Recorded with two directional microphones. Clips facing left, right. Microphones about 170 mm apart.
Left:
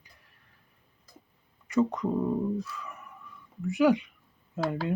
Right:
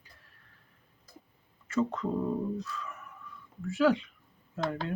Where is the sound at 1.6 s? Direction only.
15° left (ahead or behind).